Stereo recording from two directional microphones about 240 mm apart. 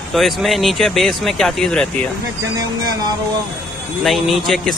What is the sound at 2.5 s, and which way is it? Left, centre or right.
Speech, centre.